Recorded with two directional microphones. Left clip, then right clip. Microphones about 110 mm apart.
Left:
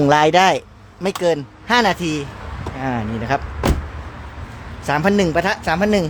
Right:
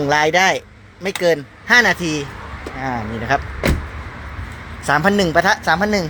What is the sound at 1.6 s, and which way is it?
Speech, 30° left (ahead or behind).